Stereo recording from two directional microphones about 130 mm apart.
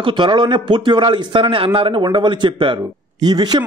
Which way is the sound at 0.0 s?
40° right (ahead or behind).